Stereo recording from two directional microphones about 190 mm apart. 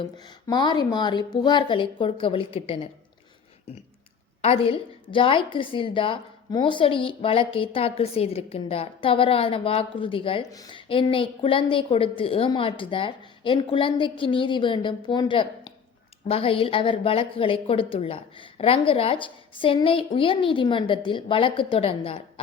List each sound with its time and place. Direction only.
0.0 s a woman's voice: 20° left (ahead or behind)
4.4 s a woman's voice: 30° left (ahead or behind)